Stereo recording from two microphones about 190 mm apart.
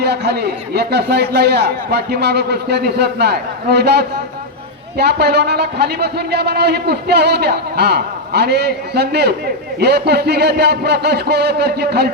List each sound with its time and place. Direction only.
0.0 s a man's voice: 60° right (ahead or behind)